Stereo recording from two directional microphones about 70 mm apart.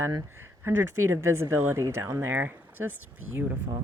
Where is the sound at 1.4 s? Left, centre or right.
Right.